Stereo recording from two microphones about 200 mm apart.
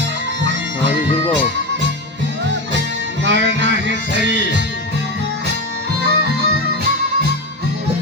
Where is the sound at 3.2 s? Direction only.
60° right (ahead or behind).